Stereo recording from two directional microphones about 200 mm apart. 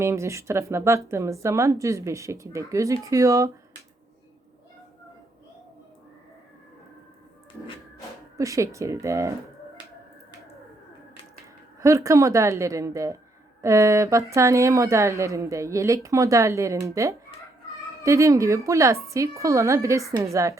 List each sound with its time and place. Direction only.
0.0 s speech: 15° right (ahead or behind)
8.4 s speech: 15° right (ahead or behind)
11.8 s speech: 15° right (ahead or behind)